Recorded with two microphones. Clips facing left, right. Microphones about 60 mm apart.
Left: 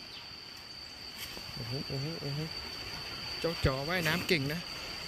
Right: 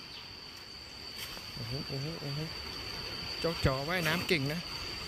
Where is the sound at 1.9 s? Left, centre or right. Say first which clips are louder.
Left 1 dB; centre.